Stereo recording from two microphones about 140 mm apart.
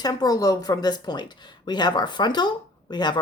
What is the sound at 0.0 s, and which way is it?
Speech, 25° left (ahead or behind).